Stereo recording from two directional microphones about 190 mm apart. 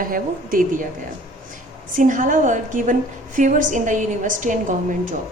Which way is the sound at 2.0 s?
40° right (ahead or behind).